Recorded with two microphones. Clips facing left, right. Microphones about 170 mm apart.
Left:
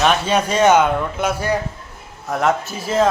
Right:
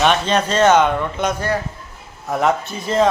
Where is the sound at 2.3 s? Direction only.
Centre (ahead or behind).